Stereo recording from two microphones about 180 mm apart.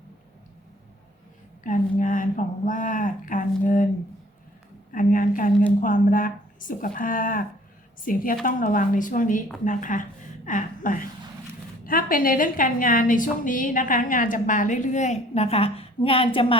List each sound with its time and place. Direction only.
1.6 s a woman's voice: 45° left (ahead or behind)
4.9 s a woman's voice: 50° left (ahead or behind); by 16.6 s 30° left (ahead or behind)